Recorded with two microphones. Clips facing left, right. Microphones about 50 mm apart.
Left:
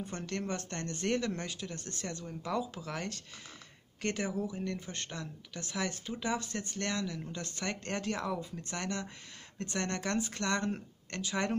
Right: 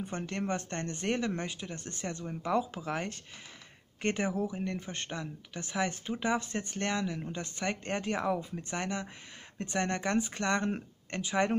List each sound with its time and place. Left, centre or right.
0.0 s speech: right